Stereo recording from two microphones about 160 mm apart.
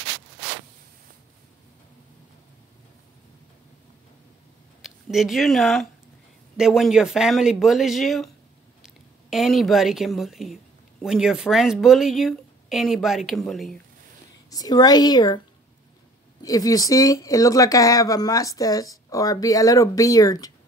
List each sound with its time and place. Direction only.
4.8 s a woman's voice: centre (ahead or behind)
14.5 s speech: 25° left (ahead or behind)
16.4 s speech: 20° left (ahead or behind)